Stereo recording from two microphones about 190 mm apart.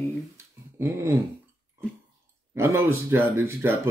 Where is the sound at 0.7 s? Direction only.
10° right (ahead or behind).